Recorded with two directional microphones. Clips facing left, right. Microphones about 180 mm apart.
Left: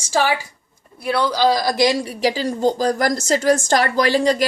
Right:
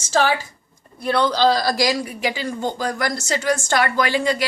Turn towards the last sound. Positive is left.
turn(degrees=40)  # may be behind; listen again after turning